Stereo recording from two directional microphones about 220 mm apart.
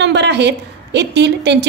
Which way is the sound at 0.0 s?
50° right (ahead or behind).